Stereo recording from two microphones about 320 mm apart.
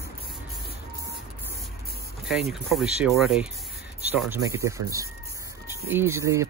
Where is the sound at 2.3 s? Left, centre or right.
Centre.